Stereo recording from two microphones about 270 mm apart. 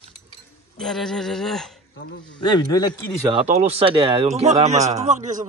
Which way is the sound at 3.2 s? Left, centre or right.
Right.